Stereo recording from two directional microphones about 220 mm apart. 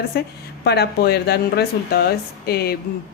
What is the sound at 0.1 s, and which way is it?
Speech, 45° left (ahead or behind).